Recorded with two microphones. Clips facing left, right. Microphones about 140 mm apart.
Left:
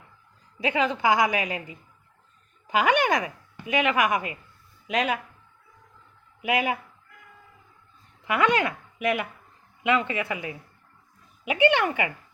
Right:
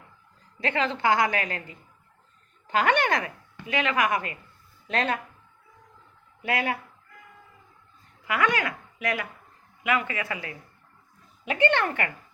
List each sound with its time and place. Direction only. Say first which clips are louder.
0.6 s a woman's voice: left 2 dB; 10° left (ahead or behind)
6.4 s a woman's voice: left 2 dB; 15° left (ahead or behind)
8.2 s a woman's voice: left 3 dB; 20° left (ahead or behind)